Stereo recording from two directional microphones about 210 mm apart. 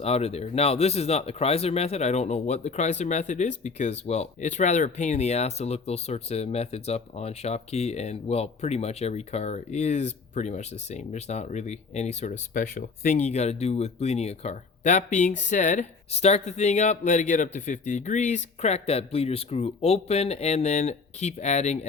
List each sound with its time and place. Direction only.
0.0 s speech: 30° left (ahead or behind)